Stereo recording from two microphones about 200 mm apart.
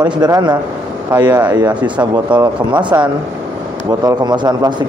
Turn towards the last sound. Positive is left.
turn(degrees=-20)  # may be behind; listen again after turning